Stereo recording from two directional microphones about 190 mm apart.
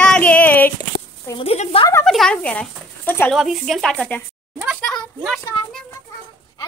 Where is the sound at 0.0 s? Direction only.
5° left (ahead or behind).